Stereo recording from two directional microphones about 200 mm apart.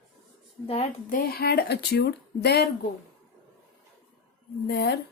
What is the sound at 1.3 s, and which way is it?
Speech, 50° left (ahead or behind).